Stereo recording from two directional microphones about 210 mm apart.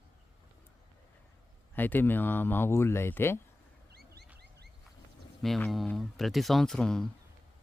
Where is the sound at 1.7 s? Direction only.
10° left (ahead or behind).